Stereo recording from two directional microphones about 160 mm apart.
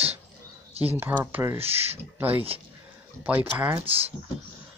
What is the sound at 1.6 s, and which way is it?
Speech, 40° right (ahead or behind).